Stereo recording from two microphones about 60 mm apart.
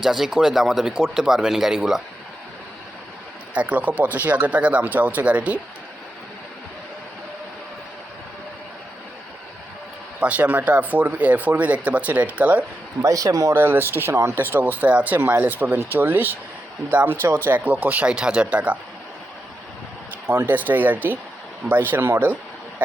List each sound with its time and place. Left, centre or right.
0.0 s speech: centre
3.5 s speech: right
10.2 s speech: right
13.0 s a man's voice: right
13.5 s speech: right
14.3 s speech: right
18.2 s speech: centre
20.2 s speech: right